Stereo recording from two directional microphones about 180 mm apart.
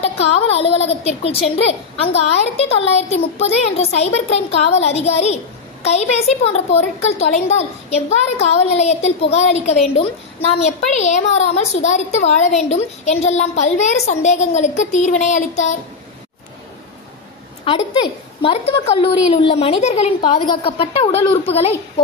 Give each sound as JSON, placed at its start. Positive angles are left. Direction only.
{"t": 0.6, "sound": "a woman's voice", "side_deg": 35}
{"t": 18.4, "sound": "a woman's voice", "side_deg": 30}
{"t": 20.2, "sound": "a woman's voice", "side_deg": 25}